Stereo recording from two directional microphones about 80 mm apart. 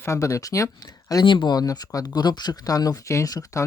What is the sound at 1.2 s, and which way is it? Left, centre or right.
Speech, left.